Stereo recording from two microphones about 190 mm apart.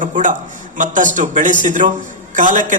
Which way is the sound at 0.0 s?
40° right (ahead or behind).